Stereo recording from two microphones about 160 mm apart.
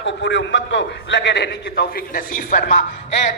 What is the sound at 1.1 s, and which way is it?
A man's voice, 90° left.